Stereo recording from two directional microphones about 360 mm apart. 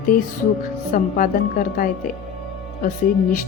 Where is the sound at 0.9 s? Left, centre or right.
Left.